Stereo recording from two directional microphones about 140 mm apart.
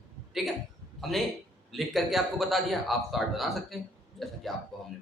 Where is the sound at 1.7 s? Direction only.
Centre (ahead or behind).